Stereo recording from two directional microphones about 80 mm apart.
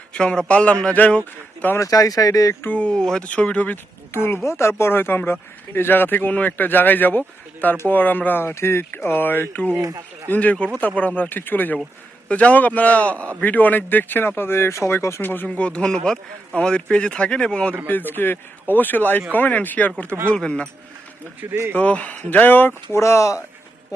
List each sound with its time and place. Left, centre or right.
0.1 s speech: centre
1.8 s speech: left
2.6 s speech: centre
15.4 s speech: centre
17.8 s speech: left
21.5 s speech: right
21.8 s speech: centre; by 23.4 s left